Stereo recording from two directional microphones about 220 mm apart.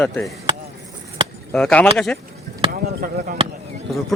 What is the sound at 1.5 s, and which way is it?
Speech, 5° left (ahead or behind).